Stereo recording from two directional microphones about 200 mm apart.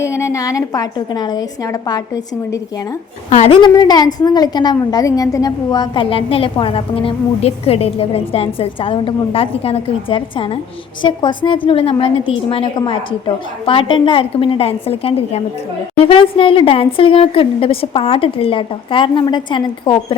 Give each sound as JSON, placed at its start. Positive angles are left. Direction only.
{"t": 0.0, "sound": "a woman's voice", "side_deg": 15}
{"t": 3.2, "sound": "a woman's voice", "side_deg": 35}